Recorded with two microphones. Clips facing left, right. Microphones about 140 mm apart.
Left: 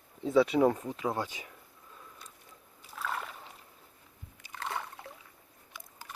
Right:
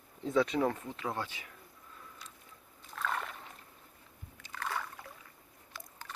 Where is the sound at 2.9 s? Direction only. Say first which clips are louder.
Even; 5° left (ahead or behind).